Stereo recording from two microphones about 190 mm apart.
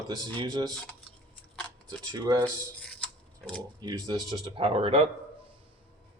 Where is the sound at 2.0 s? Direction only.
20° right (ahead or behind).